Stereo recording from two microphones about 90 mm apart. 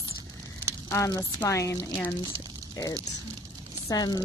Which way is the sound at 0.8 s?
35° left (ahead or behind).